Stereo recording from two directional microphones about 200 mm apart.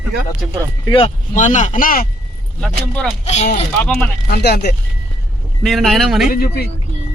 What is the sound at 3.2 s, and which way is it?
Speech, 35° left (ahead or behind).